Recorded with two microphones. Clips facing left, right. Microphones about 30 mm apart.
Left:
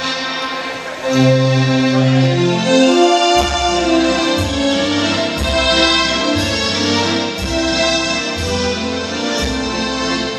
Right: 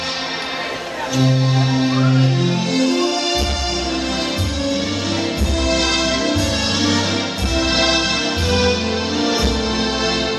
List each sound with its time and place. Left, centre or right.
1.1 s music: left
5.6 s music: left
7.5 s music: centre